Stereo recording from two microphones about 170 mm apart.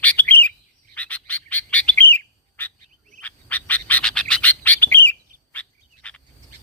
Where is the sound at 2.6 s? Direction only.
10° left (ahead or behind).